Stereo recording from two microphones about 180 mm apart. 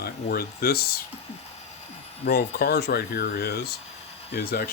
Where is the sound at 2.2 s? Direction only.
60° left (ahead or behind).